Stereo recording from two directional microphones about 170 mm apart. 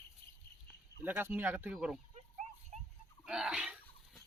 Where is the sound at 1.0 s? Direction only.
10° right (ahead or behind).